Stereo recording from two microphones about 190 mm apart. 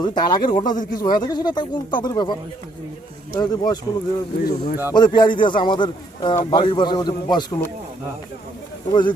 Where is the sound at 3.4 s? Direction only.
20° left (ahead or behind).